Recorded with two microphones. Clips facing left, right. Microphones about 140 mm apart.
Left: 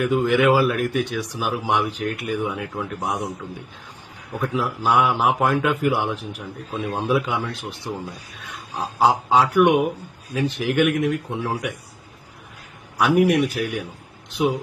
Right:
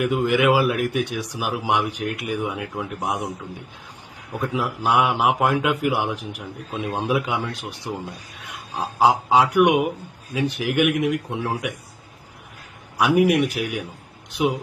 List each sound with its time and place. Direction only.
0.0 s speech: 10° right (ahead or behind)
4.3 s speech: 10° right (ahead or behind)
13.0 s speech: 10° right (ahead or behind)